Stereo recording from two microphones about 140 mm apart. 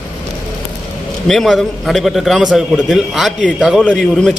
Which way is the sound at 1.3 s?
Centre (ahead or behind).